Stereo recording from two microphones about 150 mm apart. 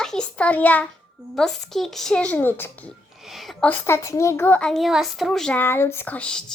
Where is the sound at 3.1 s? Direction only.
Centre (ahead or behind).